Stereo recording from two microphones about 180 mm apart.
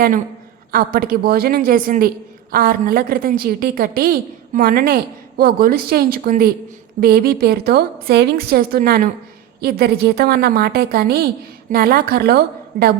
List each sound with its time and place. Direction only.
0.7 s a woman's voice: 55° right (ahead or behind)